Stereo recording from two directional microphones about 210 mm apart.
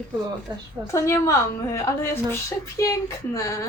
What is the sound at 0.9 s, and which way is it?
A woman's voice, 15° left (ahead or behind).